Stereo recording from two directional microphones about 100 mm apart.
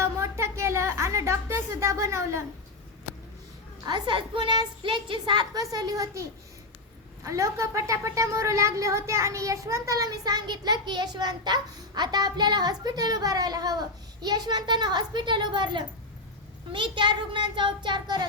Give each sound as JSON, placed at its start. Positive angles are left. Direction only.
{"t": 0.0, "sound": "a sound", "side_deg": -25}
{"t": 3.8, "sound": "a woman's voice", "side_deg": -50}
{"t": 5.5, "sound": "a woman's voice", "side_deg": -40}